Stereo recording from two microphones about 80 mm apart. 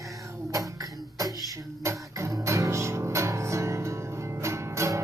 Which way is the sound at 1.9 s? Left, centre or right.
Right.